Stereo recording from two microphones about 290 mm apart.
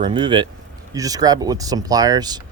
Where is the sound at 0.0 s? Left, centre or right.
Centre.